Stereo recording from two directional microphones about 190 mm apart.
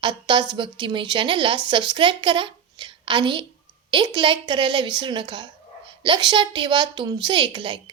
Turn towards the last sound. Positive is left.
turn(degrees=-25)  # may be behind; listen again after turning